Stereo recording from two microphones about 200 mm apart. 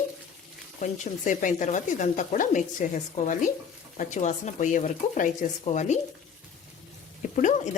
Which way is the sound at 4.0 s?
35° left (ahead or behind).